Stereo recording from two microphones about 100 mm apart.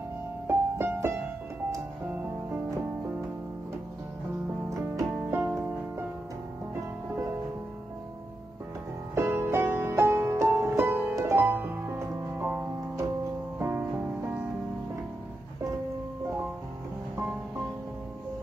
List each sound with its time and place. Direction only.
0.5 s music: 25° right (ahead or behind)
5.1 s music: 20° right (ahead or behind)
9.1 s music: 20° right (ahead or behind)